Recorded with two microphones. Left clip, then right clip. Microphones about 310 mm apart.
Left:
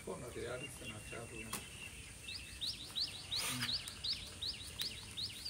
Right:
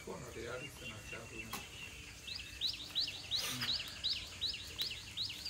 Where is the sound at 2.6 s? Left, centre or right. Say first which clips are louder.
Right 3 dB; right.